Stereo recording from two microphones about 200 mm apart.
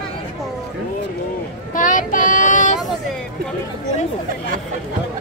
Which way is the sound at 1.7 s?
40° left (ahead or behind).